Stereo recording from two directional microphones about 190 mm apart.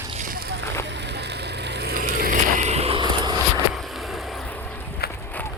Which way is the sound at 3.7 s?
Centre (ahead or behind).